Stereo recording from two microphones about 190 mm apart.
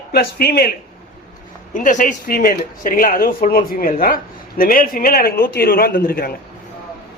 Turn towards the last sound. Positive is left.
turn(degrees=50)  # may be behind; listen again after turning